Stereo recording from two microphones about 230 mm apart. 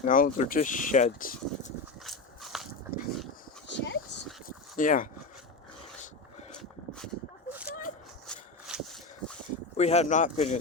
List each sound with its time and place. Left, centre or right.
0.0 s speech: left
2.0 s walk: centre
3.7 s dog: left
4.4 s dog: left
6.6 s a sound: centre
7.5 s a sound: centre
9.7 s speech: left